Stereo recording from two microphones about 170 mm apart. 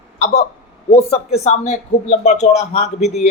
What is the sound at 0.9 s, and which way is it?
Speech, 35° left (ahead or behind).